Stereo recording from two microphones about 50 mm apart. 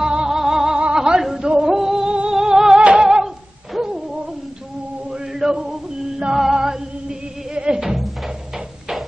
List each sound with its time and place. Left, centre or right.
0.0 s music: centre
0.9 s a sound: centre
1.5 s music: centre
3.0 s a sound: centre
3.7 s owl: centre
5.1 s music: centre
7.8 s music: centre